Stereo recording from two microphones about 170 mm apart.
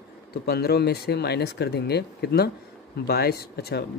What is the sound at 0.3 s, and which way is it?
Speech, 70° left (ahead or behind).